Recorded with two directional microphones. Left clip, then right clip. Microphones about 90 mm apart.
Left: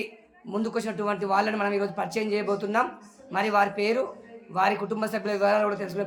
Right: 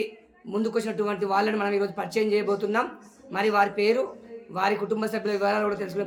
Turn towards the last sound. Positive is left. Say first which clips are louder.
# left 1 dB
turn(degrees=20)  # may be behind; listen again after turning